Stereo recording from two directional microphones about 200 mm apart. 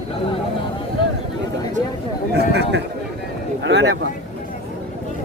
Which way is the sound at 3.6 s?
60° right (ahead or behind).